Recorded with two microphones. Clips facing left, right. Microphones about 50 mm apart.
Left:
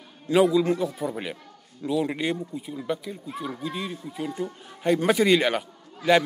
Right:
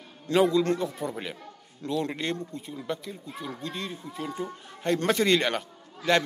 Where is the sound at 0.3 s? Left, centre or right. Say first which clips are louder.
Left 2 dB; centre.